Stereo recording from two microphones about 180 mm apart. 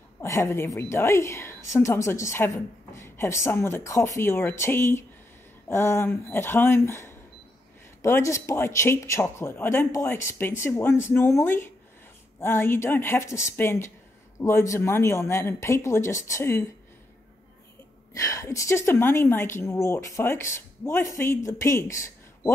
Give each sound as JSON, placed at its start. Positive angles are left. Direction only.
{"t": 0.2, "sound": "a woman's voice", "side_deg": 15}
{"t": 18.1, "sound": "a woman's voice", "side_deg": 20}